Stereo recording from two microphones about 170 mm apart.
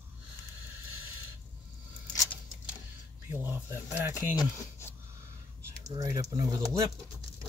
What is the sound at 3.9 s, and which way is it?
Speech, 10° right (ahead or behind).